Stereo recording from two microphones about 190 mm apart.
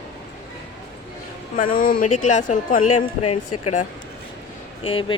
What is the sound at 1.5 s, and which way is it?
Speech, 45° left (ahead or behind).